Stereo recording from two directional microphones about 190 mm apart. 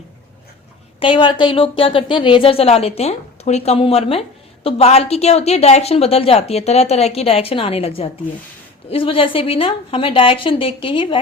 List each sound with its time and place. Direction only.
0.9 s a woman's voice: 25° left (ahead or behind)